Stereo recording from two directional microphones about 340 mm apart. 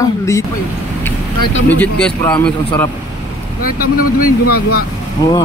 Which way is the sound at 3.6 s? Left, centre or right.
Left.